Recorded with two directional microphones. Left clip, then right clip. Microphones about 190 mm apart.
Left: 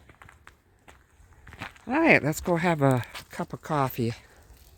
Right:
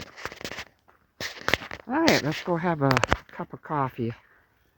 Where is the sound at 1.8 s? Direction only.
15° left (ahead or behind).